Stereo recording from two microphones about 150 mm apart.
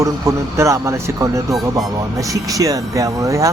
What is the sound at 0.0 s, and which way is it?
A man's voice, 20° right (ahead or behind).